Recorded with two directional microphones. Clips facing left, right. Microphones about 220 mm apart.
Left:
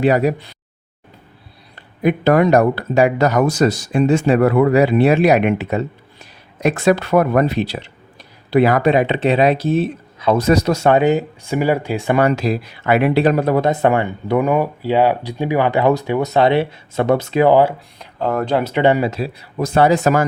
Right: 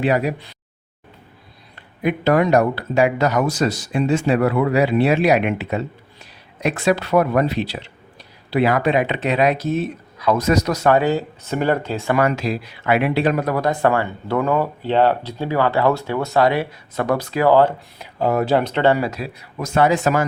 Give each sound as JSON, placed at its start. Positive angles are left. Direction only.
{"t": 0.0, "sound": "speech", "side_deg": 40}
{"t": 2.0, "sound": "speech", "side_deg": 45}
{"t": 12.2, "sound": "speech", "side_deg": 40}
{"t": 18.0, "sound": "speech", "side_deg": -10}
{"t": 18.6, "sound": "speech", "side_deg": 15}